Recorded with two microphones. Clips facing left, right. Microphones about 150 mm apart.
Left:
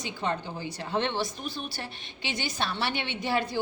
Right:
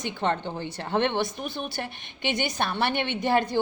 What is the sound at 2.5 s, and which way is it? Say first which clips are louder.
Speech: right 4 dB; 50° right (ahead or behind).